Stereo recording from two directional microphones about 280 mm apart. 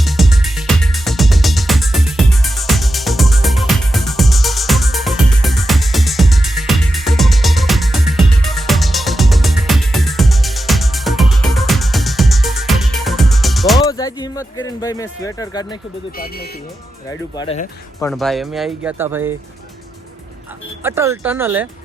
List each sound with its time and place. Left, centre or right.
0.0 s music: centre
13.7 s a sound: centre
14.8 s speech: centre
16.1 s speech: left
17.1 s speech: centre
18.1 s speech: centre
20.8 s speech: centre